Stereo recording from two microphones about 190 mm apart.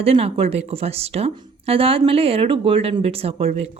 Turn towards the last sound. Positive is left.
turn(degrees=-30)  # may be behind; listen again after turning